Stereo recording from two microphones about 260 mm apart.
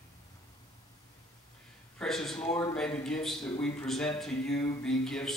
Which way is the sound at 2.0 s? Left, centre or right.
Centre.